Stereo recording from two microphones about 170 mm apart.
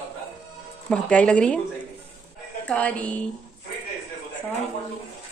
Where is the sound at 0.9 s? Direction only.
5° left (ahead or behind).